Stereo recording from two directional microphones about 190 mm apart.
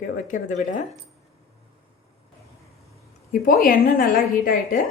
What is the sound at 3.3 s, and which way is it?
A woman's voice, 45° left (ahead or behind).